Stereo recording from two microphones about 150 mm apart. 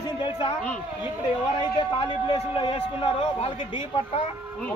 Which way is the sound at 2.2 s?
35° left (ahead or behind).